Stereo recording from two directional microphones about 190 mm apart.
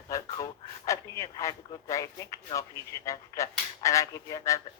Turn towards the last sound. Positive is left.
turn(degrees=15)  # may be behind; listen again after turning